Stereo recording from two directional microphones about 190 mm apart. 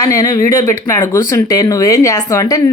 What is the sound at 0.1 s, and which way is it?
Speech, 15° left (ahead or behind).